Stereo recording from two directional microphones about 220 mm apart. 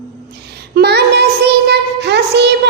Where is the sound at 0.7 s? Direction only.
50° right (ahead or behind).